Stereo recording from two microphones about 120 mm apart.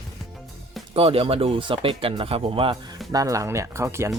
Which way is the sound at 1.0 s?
50° right (ahead or behind).